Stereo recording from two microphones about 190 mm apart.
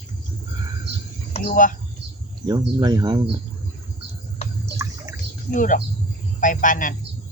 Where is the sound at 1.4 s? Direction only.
45° left (ahead or behind).